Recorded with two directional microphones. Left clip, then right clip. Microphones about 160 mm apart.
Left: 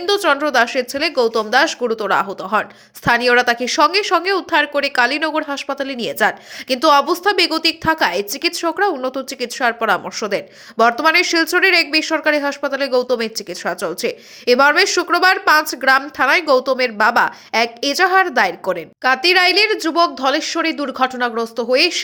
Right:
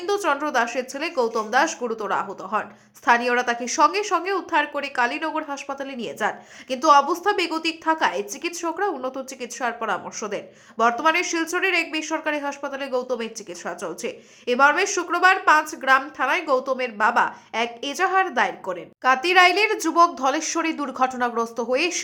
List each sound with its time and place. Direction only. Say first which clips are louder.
0.0 s a woman's voice: left 7 dB; 20° left (ahead or behind)
19.0 s a woman's voice: left 3 dB; 15° left (ahead or behind)